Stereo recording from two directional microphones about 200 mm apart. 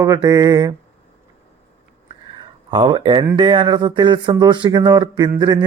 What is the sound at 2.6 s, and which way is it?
Speech, 25° right (ahead or behind).